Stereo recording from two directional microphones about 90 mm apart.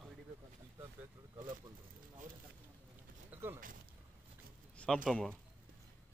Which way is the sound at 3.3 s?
25° right (ahead or behind).